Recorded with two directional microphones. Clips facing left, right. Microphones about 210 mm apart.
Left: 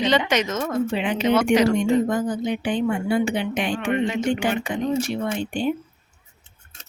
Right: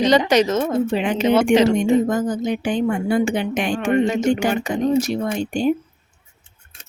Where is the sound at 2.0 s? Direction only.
45° right (ahead or behind).